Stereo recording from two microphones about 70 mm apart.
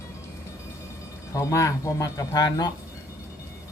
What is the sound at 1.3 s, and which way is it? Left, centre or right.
Speech, left.